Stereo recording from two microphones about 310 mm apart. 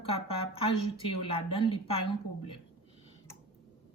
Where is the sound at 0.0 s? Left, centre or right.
Centre.